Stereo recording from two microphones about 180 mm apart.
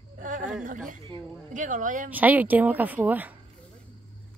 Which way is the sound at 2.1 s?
10° right (ahead or behind).